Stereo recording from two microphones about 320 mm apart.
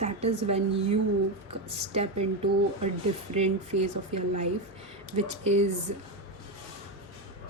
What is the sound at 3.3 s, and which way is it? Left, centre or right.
A woman's voice, centre.